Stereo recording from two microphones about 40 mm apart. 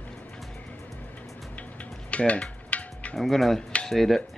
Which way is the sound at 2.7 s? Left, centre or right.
Left.